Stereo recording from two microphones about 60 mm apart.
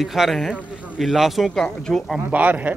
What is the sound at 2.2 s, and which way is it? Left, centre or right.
Speech, right.